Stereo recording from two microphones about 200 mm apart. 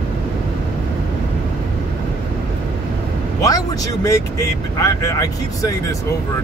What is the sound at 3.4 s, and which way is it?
Speech, 15° left (ahead or behind).